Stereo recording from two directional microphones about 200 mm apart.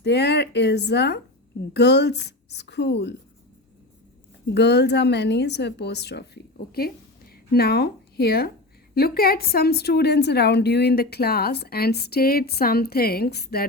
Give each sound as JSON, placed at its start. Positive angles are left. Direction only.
{"t": 0.0, "sound": "speech", "side_deg": 55}
{"t": 4.4, "sound": "a woman's voice", "side_deg": 60}